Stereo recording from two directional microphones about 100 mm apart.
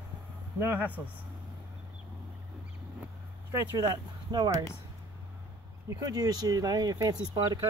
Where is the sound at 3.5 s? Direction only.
40° right (ahead or behind).